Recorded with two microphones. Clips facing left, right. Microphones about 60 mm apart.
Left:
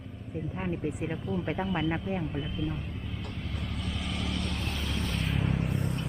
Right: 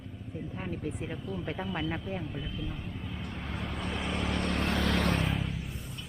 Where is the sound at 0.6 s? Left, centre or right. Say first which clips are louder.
Left 4 dB; centre.